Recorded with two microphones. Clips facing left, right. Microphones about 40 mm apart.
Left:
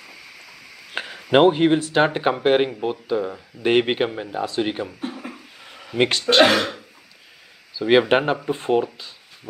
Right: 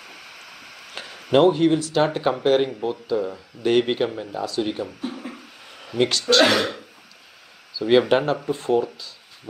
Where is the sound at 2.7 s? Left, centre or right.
Left.